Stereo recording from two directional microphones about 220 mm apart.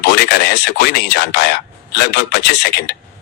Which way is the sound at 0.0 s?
50° left (ahead or behind).